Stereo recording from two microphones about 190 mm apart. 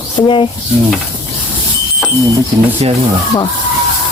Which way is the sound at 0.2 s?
25° left (ahead or behind).